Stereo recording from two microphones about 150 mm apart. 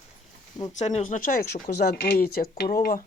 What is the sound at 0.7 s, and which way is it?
Speech, 50° left (ahead or behind).